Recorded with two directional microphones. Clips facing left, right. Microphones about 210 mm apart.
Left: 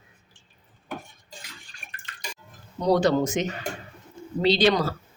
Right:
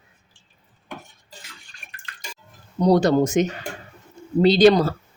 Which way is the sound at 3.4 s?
45° right (ahead or behind).